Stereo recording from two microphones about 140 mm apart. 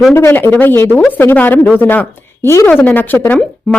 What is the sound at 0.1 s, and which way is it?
A woman's voice, 15° left (ahead or behind).